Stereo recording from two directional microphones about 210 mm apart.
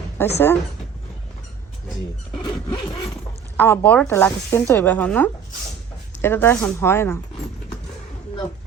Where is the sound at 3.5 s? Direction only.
10° left (ahead or behind).